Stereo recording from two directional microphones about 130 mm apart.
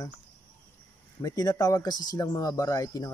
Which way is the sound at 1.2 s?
30° left (ahead or behind).